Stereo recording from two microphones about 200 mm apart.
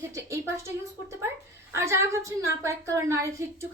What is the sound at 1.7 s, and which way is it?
A woman's voice, 15° right (ahead or behind).